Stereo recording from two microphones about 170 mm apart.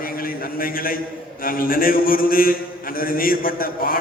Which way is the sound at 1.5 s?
55° left (ahead or behind).